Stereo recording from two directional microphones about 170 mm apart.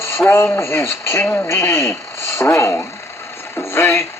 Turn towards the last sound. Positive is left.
turn(degrees=15)  # may be behind; listen again after turning